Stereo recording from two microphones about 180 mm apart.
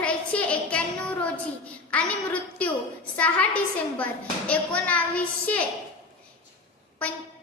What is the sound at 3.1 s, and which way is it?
Speech, 10° left (ahead or behind).